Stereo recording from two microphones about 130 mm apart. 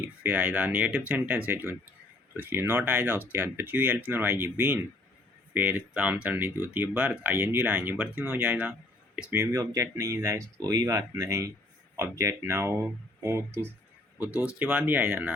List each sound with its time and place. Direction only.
0.2 s speech: 15° right (ahead or behind)
9.4 s speech: 25° right (ahead or behind)